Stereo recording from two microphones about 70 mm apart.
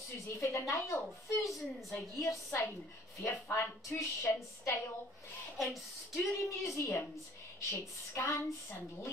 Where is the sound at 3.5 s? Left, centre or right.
Left.